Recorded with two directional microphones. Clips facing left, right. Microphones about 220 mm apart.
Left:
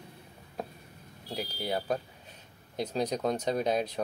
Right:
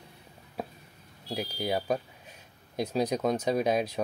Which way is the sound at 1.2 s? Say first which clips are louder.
Right 3 dB; 10° right (ahead or behind).